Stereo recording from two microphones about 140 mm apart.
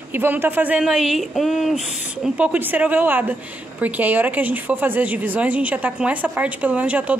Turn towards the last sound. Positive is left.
turn(degrees=-10)  # may be behind; listen again after turning